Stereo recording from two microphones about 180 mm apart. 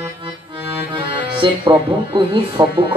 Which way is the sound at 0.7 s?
30° right (ahead or behind).